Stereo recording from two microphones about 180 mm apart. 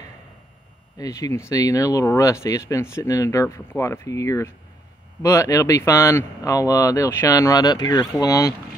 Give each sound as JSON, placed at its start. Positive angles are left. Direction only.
{"t": 0.9, "sound": "speech", "side_deg": 20}